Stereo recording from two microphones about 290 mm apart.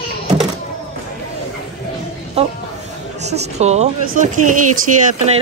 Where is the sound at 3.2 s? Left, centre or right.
Right.